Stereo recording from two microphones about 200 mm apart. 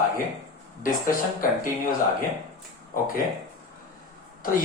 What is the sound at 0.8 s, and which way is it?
Speech, 45° left (ahead or behind).